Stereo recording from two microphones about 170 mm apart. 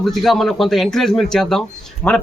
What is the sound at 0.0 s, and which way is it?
Speech, centre (ahead or behind).